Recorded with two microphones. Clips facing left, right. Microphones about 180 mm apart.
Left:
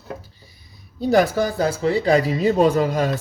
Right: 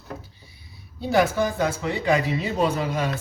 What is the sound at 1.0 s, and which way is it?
Speech, 40° left (ahead or behind).